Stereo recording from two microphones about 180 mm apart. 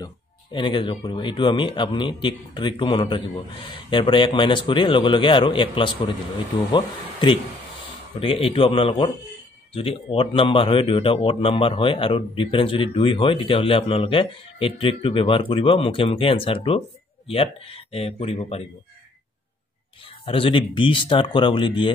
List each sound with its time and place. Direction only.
0.0 s speech: 25° left (ahead or behind)
20.1 s speech: 30° left (ahead or behind)